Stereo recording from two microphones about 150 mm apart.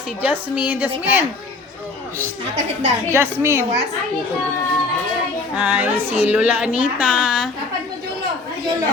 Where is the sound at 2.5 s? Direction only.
50° right (ahead or behind).